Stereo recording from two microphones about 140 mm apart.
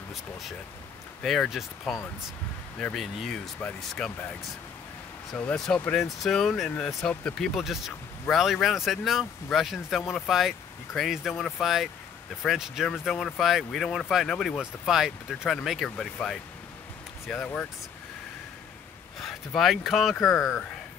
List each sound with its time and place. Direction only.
0.1 s speech: centre (ahead or behind)
5.5 s speech: 5° left (ahead or behind)
19.1 s speech: centre (ahead or behind)
20.3 s speech: 20° left (ahead or behind)